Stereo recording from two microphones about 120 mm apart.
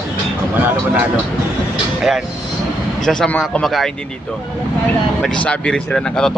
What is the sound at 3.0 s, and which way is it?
Speech, 5° left (ahead or behind).